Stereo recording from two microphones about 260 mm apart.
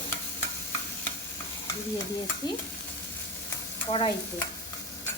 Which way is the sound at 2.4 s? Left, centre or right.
Centre.